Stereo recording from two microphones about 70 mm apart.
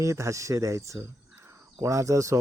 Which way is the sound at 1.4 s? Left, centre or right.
Right.